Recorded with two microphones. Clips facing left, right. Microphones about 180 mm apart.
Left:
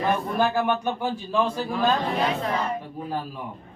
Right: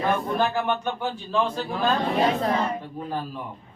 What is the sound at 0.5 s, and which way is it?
Speech, 10° left (ahead or behind).